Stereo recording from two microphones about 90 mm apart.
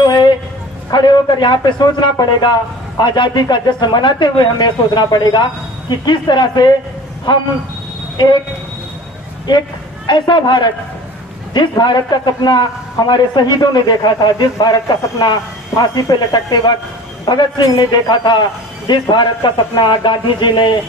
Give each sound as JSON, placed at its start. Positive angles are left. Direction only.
{"t": 0.0, "sound": "a sound", "side_deg": 55}
{"t": 0.9, "sound": "speech", "side_deg": 60}
{"t": 10.0, "sound": "a man's voice", "side_deg": 60}